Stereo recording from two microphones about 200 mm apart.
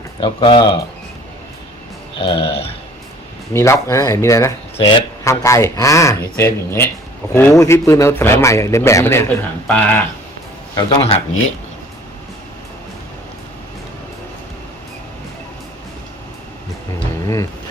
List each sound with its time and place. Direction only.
0.2 s speech: 25° left (ahead or behind)
2.1 s speech: 25° left (ahead or behind)
3.5 s speech: 15° left (ahead or behind)
10.8 s speech: 20° left (ahead or behind)